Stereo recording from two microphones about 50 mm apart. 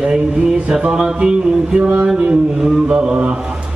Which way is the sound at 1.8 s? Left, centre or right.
Right.